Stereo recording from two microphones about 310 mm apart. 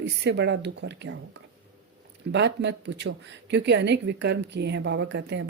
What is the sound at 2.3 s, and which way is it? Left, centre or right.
Speech, right.